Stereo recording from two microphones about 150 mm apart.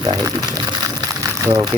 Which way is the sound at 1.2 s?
25° right (ahead or behind).